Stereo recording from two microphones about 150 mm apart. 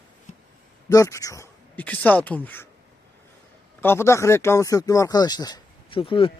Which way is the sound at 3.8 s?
15° left (ahead or behind).